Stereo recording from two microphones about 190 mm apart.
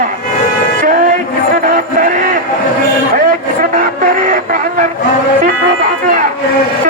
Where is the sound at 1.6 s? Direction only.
45° right (ahead or behind).